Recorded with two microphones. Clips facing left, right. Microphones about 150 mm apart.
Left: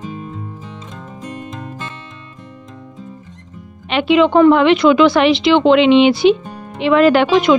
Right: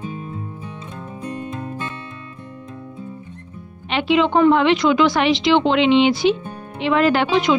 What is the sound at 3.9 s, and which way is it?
A woman's voice, 75° left (ahead or behind).